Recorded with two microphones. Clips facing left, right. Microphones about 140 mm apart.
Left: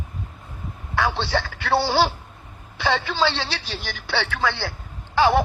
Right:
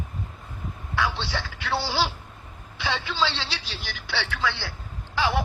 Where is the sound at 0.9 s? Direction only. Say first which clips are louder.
Left 5 dB; 50° left (ahead or behind).